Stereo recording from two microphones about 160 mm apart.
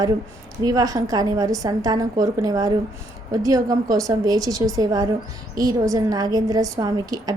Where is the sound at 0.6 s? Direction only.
25° right (ahead or behind).